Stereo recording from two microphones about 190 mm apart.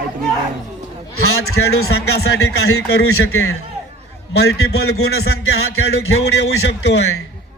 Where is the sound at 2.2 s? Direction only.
75° left (ahead or behind); by 3.5 s 90° left.